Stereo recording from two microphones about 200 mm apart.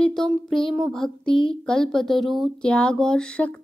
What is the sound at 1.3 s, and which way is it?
Speech, 25° left (ahead or behind).